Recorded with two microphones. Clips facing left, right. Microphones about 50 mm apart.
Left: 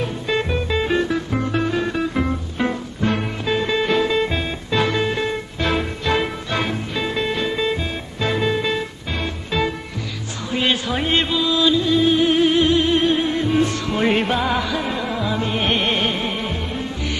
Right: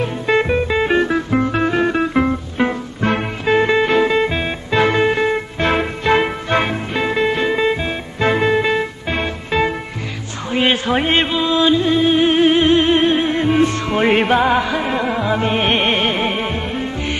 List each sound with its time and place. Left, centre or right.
0.0 s music: right